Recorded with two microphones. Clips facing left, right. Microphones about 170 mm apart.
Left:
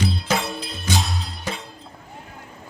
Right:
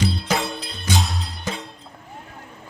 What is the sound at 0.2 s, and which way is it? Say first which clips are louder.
Music: even; centre (ahead or behind).